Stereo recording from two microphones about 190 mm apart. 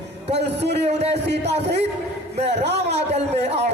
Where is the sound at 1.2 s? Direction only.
60° right (ahead or behind).